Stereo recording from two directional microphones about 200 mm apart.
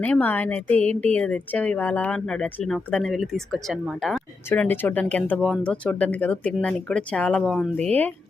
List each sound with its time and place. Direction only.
0.0 s a woman's voice: 10° left (ahead or behind)